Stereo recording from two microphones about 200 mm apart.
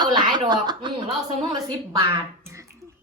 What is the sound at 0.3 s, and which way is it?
A woman's voice, 20° right (ahead or behind).